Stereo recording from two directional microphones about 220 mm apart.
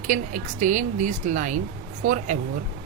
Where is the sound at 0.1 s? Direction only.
35° right (ahead or behind).